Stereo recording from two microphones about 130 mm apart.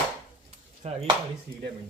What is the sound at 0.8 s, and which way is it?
Speech, 50° right (ahead or behind).